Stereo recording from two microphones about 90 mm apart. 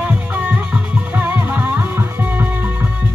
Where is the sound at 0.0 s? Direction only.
15° right (ahead or behind).